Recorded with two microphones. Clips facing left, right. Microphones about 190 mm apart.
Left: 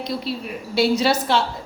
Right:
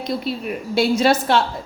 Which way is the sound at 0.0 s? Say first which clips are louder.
Right 2 dB; 50° right (ahead or behind).